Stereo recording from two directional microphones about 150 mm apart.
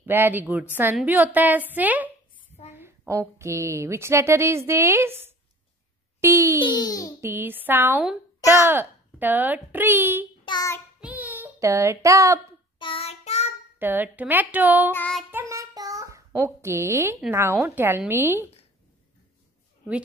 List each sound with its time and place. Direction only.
0.0 s a woman's voice: 15° right (ahead or behind)
6.2 s a sound: 20° right (ahead or behind)
6.6 s a child's voice: 30° left (ahead or behind)
7.2 s a woman's voice: 15° right (ahead or behind)
10.4 s child singing: 30° left (ahead or behind)
11.0 s child singing: 10° right (ahead or behind)
12.7 s child singing: 35° left (ahead or behind)
13.7 s a woman's voice: 15° right (ahead or behind)
14.9 s child singing: 15° left (ahead or behind)
15.3 s child singing: 20° right (ahead or behind)
16.3 s a woman's voice: 15° right (ahead or behind)